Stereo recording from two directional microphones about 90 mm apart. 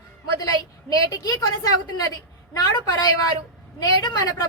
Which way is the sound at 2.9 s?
50° left (ahead or behind).